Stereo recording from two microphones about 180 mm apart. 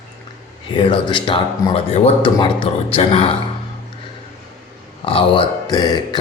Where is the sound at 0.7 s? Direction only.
25° left (ahead or behind).